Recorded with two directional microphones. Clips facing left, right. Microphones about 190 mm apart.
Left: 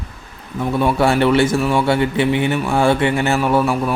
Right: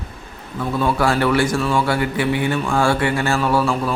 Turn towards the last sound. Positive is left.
turn(degrees=15)  # may be behind; listen again after turning